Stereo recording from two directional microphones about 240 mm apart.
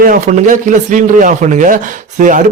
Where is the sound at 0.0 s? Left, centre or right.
Right.